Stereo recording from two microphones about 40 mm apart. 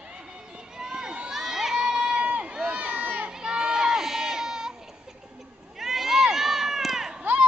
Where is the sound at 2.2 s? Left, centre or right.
Right.